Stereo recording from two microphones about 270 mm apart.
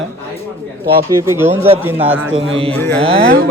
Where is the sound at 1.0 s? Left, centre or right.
Centre.